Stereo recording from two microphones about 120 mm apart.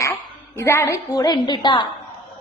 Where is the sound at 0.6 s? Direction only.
25° left (ahead or behind); by 1.8 s 40° left (ahead or behind).